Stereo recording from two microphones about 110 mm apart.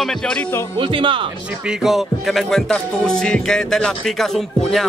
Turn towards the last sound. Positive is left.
turn(degrees=5)  # may be behind; listen again after turning